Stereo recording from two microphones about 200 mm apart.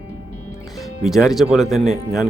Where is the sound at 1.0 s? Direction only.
Centre (ahead or behind).